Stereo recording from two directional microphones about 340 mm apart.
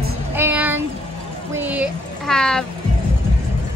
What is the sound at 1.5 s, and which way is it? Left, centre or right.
Music, centre.